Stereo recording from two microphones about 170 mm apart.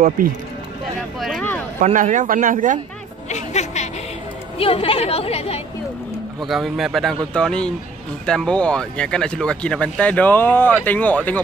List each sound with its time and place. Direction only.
0.2 s speech: 50° right (ahead or behind)
1.8 s speech: 45° right (ahead or behind)
3.3 s a sound: 45° left (ahead or behind)
4.6 s a woman's voice: 35° left (ahead or behind)
6.4 s a man's voice: centre (ahead or behind)